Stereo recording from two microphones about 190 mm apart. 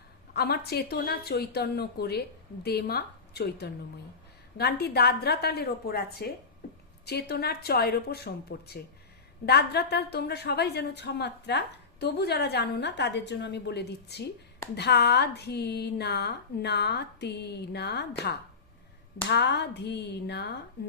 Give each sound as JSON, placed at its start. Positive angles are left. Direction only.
{"t": 0.3, "sound": "a woman's voice", "side_deg": 55}